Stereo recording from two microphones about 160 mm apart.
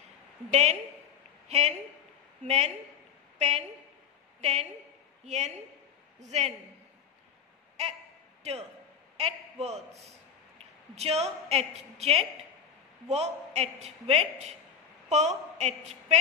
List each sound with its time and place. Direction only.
0.5 s a woman's voice: 45° right (ahead or behind)
9.1 s a man's voice: 40° right (ahead or behind)